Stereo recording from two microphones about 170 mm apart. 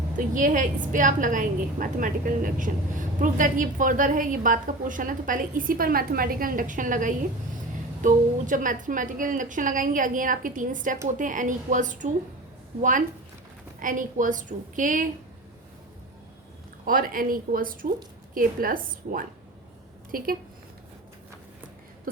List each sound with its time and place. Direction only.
0.3 s a woman's voice: 50° right (ahead or behind)
13.7 s a woman's voice: 50° right (ahead or behind)
16.8 s speech: 55° right (ahead or behind)